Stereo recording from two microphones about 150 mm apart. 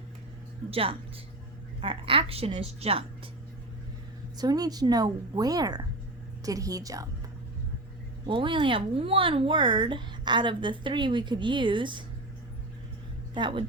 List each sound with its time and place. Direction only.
0.7 s speech: 40° right (ahead or behind)
4.4 s a woman's voice: 25° right (ahead or behind)
8.3 s speech: 35° right (ahead or behind)
13.3 s speech: 30° right (ahead or behind)